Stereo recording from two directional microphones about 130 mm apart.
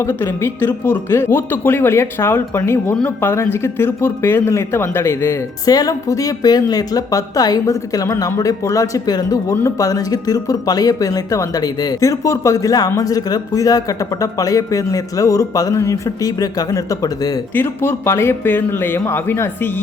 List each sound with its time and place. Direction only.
0.0 s speech: 20° left (ahead or behind)
17.5 s speech: 15° left (ahead or behind)